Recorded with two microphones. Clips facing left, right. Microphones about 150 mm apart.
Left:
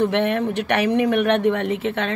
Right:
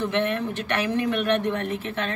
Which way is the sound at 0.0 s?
65° left (ahead or behind).